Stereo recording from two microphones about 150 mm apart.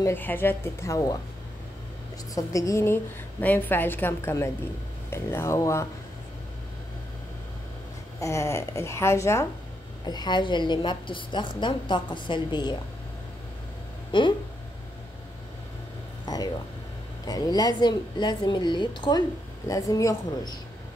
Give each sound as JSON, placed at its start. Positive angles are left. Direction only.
{"t": 0.0, "sound": "a woman's voice", "side_deg": 15}
{"t": 2.3, "sound": "a woman's voice", "side_deg": 20}
{"t": 8.2, "sound": "a woman's voice", "side_deg": 20}
{"t": 14.1, "sound": "a woman's voice", "side_deg": 35}
{"t": 16.3, "sound": "a sound", "side_deg": 30}
{"t": 17.2, "sound": "a woman's voice", "side_deg": 25}